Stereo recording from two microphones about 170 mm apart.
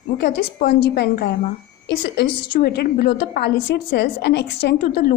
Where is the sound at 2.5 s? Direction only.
60° left (ahead or behind).